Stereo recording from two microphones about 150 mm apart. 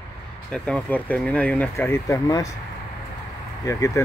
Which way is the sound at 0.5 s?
10° left (ahead or behind).